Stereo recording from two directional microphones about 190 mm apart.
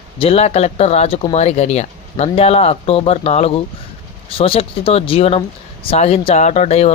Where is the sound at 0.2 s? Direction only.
30° left (ahead or behind).